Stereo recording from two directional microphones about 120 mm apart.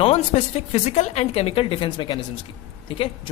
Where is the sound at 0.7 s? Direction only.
65° left (ahead or behind).